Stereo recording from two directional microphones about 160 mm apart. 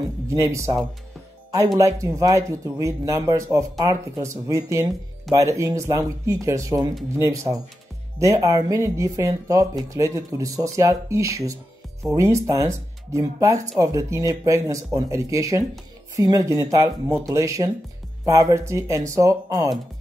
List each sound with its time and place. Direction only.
0.3 s speech: 20° right (ahead or behind)
1.8 s speech: 20° right (ahead or behind)